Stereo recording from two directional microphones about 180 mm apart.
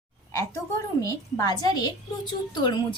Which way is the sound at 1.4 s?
20° left (ahead or behind).